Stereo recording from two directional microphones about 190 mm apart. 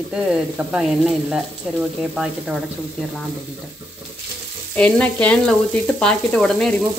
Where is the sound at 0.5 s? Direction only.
5° right (ahead or behind).